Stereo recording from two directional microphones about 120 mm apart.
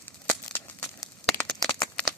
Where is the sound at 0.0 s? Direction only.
15° left (ahead or behind).